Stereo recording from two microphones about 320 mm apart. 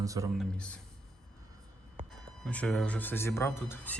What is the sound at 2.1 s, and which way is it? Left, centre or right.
Speech, centre.